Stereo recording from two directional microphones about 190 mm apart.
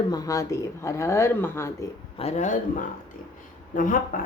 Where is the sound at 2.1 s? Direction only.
35° left (ahead or behind).